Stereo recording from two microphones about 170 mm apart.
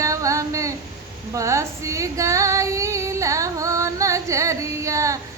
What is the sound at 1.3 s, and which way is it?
Female singing, 15° right (ahead or behind).